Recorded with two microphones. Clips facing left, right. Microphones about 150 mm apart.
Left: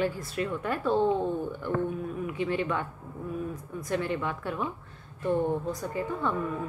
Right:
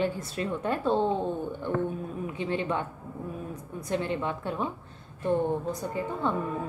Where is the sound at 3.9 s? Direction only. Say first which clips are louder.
Right 1 dB; 25° right (ahead or behind).